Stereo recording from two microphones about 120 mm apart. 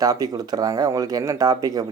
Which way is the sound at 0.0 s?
30° right (ahead or behind).